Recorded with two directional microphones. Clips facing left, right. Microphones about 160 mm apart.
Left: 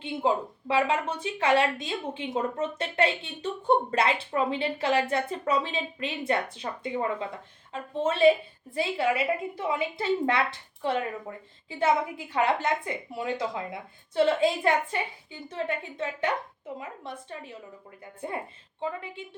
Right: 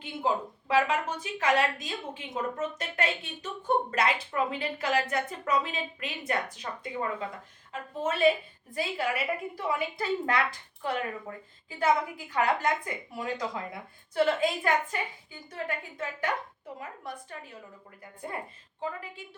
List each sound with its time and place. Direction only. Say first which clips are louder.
0.0 s a woman's voice: left 3 dB; 30° left (ahead or behind)